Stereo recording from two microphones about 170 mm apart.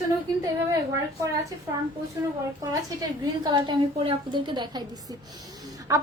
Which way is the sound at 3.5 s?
30° right (ahead or behind).